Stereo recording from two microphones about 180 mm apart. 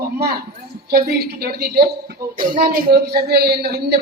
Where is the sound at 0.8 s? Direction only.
60° right (ahead or behind).